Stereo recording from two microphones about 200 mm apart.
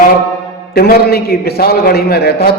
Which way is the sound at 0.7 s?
50° left (ahead or behind).